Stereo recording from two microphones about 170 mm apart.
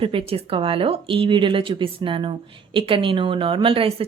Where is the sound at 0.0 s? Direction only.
30° right (ahead or behind).